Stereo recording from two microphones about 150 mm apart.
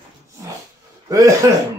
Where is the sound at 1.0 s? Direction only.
25° right (ahead or behind).